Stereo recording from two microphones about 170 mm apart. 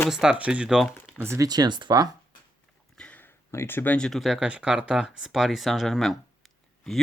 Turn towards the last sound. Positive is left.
turn(degrees=0)  # may be behind; listen again after turning